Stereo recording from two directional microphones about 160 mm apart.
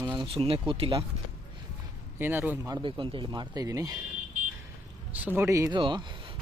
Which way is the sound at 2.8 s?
30° right (ahead or behind).